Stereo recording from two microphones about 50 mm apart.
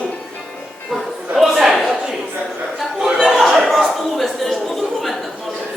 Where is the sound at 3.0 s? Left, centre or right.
Centre.